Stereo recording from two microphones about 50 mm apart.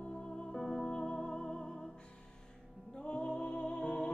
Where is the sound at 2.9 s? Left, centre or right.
Left.